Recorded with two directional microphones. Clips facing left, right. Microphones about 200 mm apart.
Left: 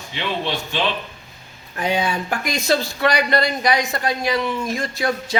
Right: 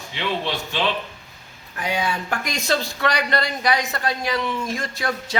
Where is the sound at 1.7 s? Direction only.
25° left (ahead or behind).